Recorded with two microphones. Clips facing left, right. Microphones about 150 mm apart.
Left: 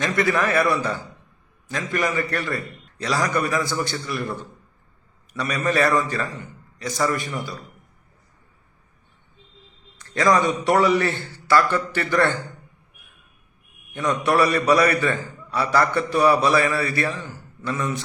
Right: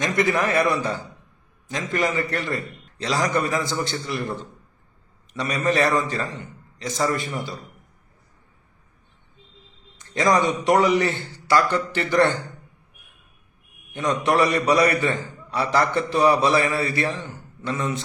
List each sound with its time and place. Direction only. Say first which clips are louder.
0.0 s a man's voice: even; 20° right (ahead or behind)
5.3 s a man's voice: right 1 dB; 20° right (ahead or behind)
10.0 s a man's voice: left 1 dB; 20° right (ahead or behind)
13.9 s a man's voice: even; 20° right (ahead or behind)